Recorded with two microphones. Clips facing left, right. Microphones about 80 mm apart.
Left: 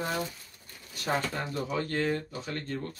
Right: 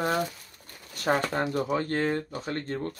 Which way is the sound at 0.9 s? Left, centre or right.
Right.